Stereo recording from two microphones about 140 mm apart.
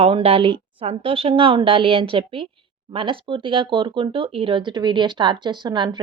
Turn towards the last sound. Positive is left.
turn(degrees=-30)  # may be behind; listen again after turning